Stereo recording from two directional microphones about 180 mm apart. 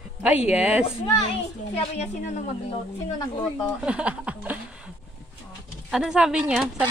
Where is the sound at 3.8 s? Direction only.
5° right (ahead or behind).